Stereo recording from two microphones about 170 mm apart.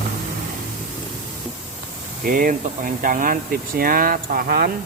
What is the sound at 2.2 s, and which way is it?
Speech, 55° right (ahead or behind).